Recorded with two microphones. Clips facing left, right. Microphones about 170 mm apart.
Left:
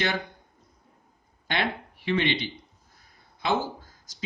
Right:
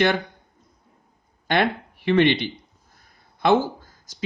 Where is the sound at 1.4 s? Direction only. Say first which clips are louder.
Right 7 dB; 55° right (ahead or behind).